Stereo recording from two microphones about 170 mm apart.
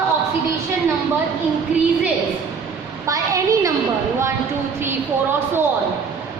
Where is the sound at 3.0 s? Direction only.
20° right (ahead or behind).